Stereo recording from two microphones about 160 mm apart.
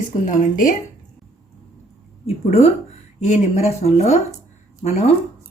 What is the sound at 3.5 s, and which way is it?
Speech, 45° left (ahead or behind).